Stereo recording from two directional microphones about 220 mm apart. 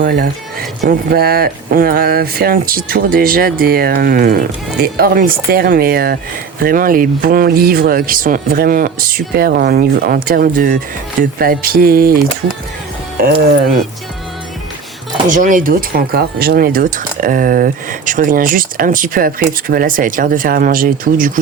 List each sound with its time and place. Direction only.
0.0 s speech: 40° right (ahead or behind)
15.3 s speech: 35° right (ahead or behind)